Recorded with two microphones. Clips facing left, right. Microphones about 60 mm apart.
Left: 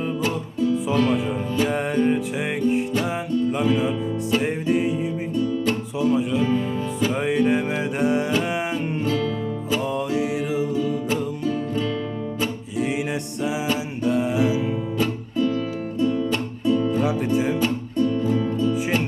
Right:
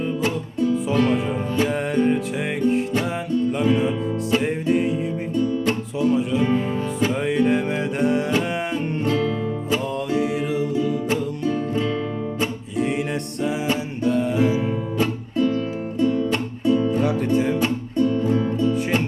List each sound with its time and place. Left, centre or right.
0.2 s music: right
1.1 s music: centre
6.4 s music: right
7.1 s music: centre
9.8 s music: centre
12.7 s music: centre
14.0 s music: centre
14.5 s music: right
17.0 s music: centre
17.9 s music: right
18.7 s music: centre